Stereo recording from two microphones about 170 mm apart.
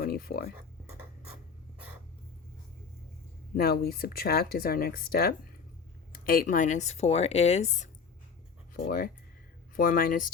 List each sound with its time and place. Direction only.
0.0 s speech: 60° left (ahead or behind)
3.5 s speech: 65° left (ahead or behind); by 7.9 s 40° left (ahead or behind)
8.7 s speech: 55° left (ahead or behind)